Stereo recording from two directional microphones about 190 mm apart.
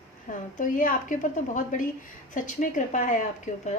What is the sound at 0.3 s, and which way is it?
A woman's voice, 45° left (ahead or behind).